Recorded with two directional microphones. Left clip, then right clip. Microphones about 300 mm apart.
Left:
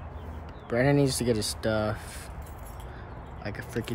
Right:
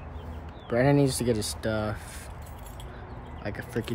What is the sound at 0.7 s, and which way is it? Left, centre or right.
Speech, centre.